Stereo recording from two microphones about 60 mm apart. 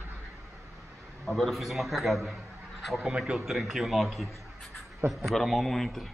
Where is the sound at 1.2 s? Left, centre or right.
Centre.